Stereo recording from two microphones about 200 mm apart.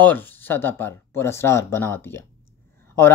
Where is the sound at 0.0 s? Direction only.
10° left (ahead or behind).